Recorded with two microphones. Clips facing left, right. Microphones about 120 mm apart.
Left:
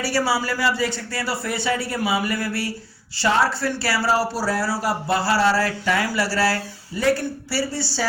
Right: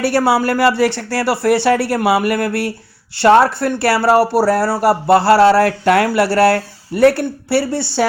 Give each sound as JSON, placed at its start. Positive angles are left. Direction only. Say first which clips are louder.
{"t": 0.0, "sound": "speech", "louder": "right 8 dB", "side_deg": -60}